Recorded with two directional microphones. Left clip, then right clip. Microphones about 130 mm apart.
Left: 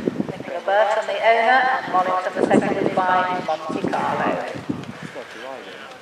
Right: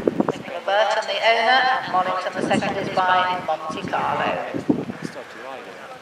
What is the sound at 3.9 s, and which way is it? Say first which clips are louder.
Speech: even; 40° right (ahead or behind).